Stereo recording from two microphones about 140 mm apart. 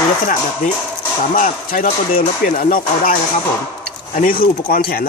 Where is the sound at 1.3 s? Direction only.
80° left.